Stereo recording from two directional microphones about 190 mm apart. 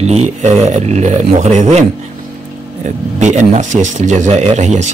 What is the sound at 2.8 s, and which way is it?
Speech, 40° right (ahead or behind).